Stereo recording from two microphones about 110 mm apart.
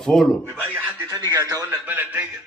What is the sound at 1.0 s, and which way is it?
Speech, 35° right (ahead or behind).